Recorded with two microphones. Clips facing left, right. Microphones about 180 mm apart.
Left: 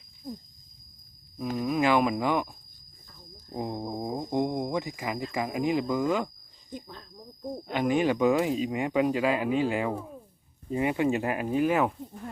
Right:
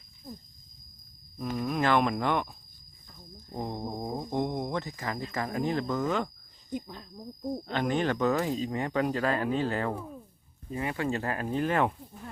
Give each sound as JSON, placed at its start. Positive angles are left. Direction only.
{"t": 1.4, "sound": "speech", "side_deg": 5}
{"t": 3.5, "sound": "speech", "side_deg": 10}
{"t": 6.7, "sound": "speech", "side_deg": -10}
{"t": 7.7, "sound": "speech", "side_deg": 10}